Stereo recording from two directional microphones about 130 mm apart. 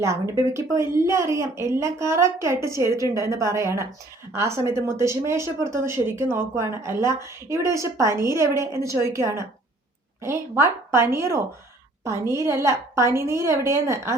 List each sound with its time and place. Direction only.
0.0 s speech: 20° right (ahead or behind)